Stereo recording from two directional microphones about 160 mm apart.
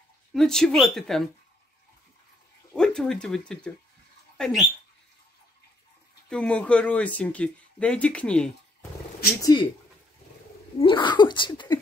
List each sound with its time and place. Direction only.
0.3 s speech: 5° left (ahead or behind)
2.7 s speech: 5° left (ahead or behind)
6.2 s speech: 5° left (ahead or behind)
9.4 s speech: 25° left (ahead or behind)
10.8 s speech: 30° left (ahead or behind)